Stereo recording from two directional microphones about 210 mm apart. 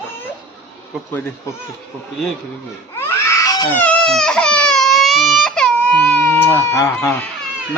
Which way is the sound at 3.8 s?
Centre (ahead or behind).